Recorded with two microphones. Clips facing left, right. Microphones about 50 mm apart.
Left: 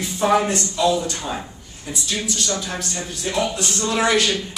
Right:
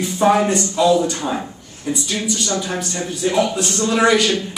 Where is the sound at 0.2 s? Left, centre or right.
Centre.